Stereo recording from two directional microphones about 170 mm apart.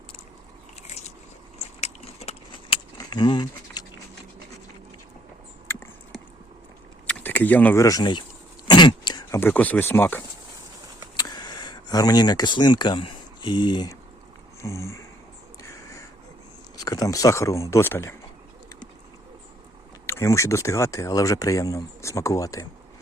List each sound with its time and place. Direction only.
0.8 s biting: 40° left (ahead or behind)
5.7 s a sound: 15° left (ahead or behind)
7.1 s speech: 10° left (ahead or behind)
8.6 s throat clearing: 25° left (ahead or behind)
9.4 s speech: 10° left (ahead or behind)
11.2 s speech: 25° left (ahead or behind)
14.6 s a sound: 15° left (ahead or behind)
15.6 s crow: 20° left (ahead or behind)
16.7 s speech: 20° left (ahead or behind)
20.1 s speech: 15° left (ahead or behind)